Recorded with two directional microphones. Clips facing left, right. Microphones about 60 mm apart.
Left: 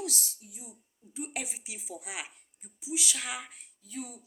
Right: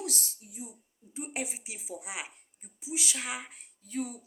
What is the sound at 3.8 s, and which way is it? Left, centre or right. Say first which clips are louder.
Speech: right 6 dB; right.